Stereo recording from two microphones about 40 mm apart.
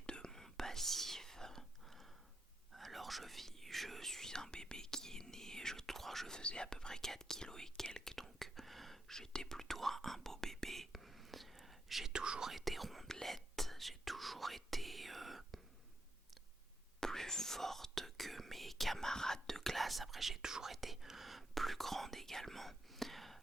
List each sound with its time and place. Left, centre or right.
0.0 s whispering: centre
6.4 s speech: left
7.9 s whispering: centre
12.1 s speech: right
12.5 s speech: centre
17.0 s speech: centre